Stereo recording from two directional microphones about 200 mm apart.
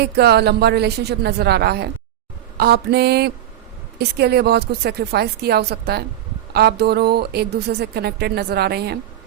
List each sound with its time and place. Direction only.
0.0 s a woman's voice: 55° right (ahead or behind)